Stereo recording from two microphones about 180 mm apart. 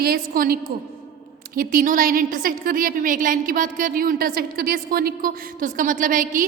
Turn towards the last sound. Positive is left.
turn(degrees=-50)  # may be behind; listen again after turning